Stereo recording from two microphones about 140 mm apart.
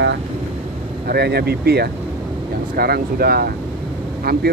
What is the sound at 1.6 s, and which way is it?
Speech, 90° right.